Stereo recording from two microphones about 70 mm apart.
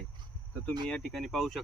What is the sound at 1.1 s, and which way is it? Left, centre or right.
Speech, centre.